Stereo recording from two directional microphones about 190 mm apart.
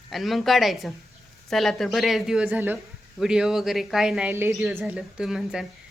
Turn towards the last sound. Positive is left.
turn(degrees=0)  # may be behind; listen again after turning